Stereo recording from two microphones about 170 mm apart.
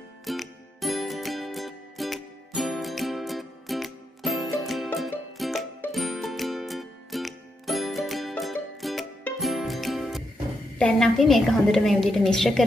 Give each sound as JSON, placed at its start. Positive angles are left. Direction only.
{"t": 0.2, "sound": "music", "side_deg": 0}
{"t": 10.8, "sound": "a woman's voice", "side_deg": 5}